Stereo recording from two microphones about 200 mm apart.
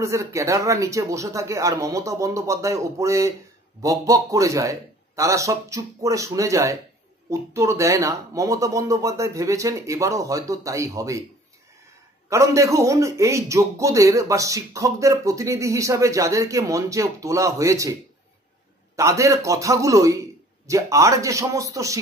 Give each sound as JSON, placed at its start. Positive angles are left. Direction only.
{"t": 0.0, "sound": "a man's voice", "side_deg": -15}
{"t": 12.3, "sound": "a man's voice", "side_deg": -15}
{"t": 18.9, "sound": "a man's voice", "side_deg": -15}